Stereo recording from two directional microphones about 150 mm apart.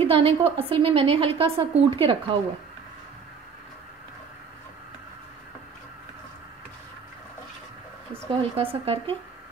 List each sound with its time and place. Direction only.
0.0 s a woman's voice: 40° right (ahead or behind)
8.3 s a woman's voice: 40° right (ahead or behind)